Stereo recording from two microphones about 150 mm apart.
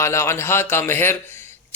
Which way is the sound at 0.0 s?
20° left (ahead or behind).